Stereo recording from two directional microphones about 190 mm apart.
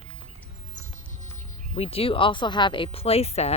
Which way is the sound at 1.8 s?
30° left (ahead or behind).